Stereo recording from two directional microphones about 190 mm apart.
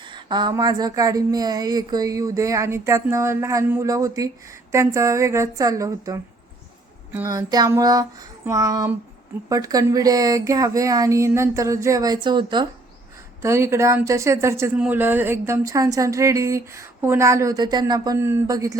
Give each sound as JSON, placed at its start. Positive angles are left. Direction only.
{"t": 0.0, "sound": "speech", "side_deg": -25}
{"t": 7.1, "sound": "child singing", "side_deg": -15}
{"t": 8.4, "sound": "speech", "side_deg": -20}